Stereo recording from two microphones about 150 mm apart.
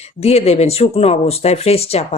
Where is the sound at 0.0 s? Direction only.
45° left (ahead or behind).